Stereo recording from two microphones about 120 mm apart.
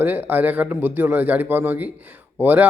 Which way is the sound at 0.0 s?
15° right (ahead or behind).